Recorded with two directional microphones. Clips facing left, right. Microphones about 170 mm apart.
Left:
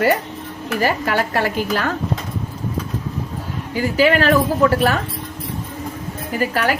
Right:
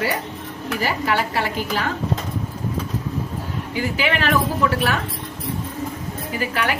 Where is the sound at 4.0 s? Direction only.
40° left (ahead or behind).